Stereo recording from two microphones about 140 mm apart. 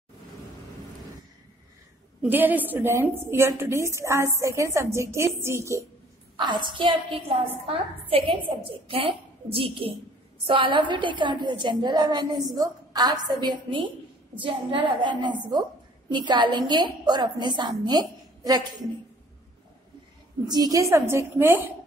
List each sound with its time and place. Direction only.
2.2 s a woman's voice: 15° right (ahead or behind)
6.3 s a woman's voice: 30° right (ahead or behind)
20.4 s a woman's voice: 30° right (ahead or behind)